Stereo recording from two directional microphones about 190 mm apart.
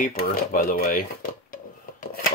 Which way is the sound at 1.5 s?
45° left (ahead or behind).